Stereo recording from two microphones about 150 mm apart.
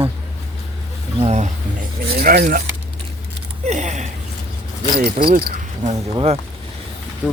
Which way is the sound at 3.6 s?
50° right (ahead or behind).